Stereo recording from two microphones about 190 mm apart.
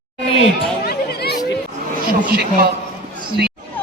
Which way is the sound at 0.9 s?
55° left (ahead or behind).